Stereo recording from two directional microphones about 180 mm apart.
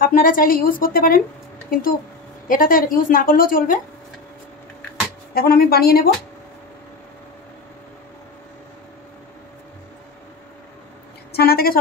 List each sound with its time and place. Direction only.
0.0 s a woman's voice: 50° left (ahead or behind)
5.3 s speech: 55° left (ahead or behind)
11.3 s speech: 60° left (ahead or behind)